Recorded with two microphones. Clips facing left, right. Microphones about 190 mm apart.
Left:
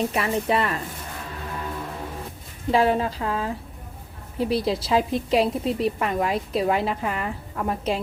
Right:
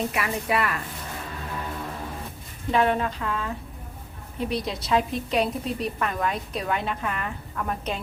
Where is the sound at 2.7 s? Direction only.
30° left (ahead or behind).